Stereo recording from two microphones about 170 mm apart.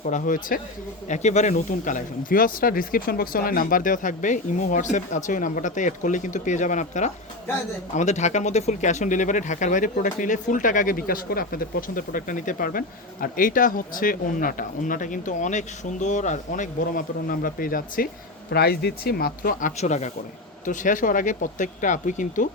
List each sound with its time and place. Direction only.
0.0 s speech: 50° left (ahead or behind)
18.5 s speech: 70° left (ahead or behind); by 22.4 s 50° left (ahead or behind)